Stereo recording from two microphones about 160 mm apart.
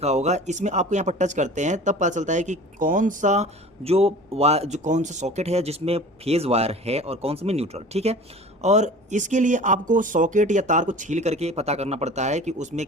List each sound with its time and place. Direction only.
0.0 s speech: 45° right (ahead or behind)